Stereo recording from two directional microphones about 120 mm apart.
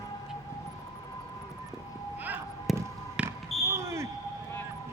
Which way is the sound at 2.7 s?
Centre (ahead or behind).